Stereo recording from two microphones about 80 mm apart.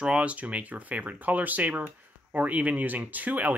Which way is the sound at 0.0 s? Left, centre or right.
Centre.